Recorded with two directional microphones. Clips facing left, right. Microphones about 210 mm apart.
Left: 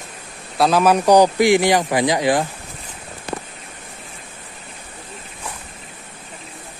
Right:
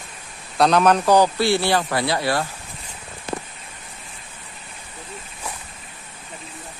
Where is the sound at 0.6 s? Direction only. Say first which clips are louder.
Left 1 dB; 5° left (ahead or behind).